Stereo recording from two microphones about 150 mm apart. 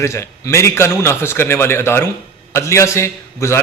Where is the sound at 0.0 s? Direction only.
20° left (ahead or behind).